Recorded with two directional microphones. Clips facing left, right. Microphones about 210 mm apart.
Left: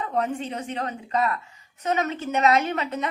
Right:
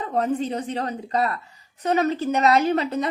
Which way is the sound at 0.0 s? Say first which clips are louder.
Right 3 dB; 35° right (ahead or behind).